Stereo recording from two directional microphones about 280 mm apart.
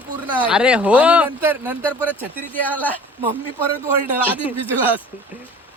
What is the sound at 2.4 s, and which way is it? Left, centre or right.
Speech, centre.